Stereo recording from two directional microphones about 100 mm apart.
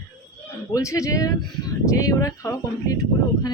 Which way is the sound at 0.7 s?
30° left (ahead or behind).